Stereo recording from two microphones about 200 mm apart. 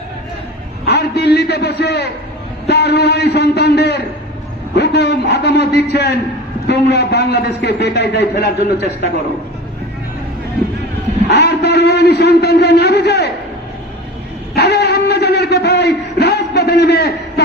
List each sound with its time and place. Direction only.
0.9 s a man's voice: 55° left (ahead or behind)
11.3 s a man's voice: 55° left (ahead or behind)
14.5 s a sound: 55° left (ahead or behind)